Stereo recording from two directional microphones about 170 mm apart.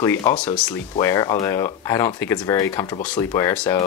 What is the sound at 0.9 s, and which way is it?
Speech, 20° left (ahead or behind).